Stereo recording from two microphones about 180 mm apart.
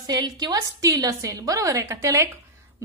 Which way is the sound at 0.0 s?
20° right (ahead or behind).